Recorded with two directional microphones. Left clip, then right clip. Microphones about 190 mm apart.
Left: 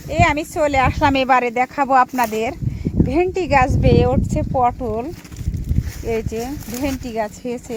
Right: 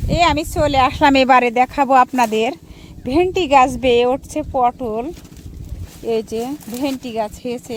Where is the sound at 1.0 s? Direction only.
30° right (ahead or behind); by 5.1 s 15° right (ahead or behind).